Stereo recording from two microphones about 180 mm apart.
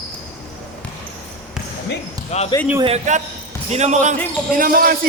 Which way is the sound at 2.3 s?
35° left (ahead or behind).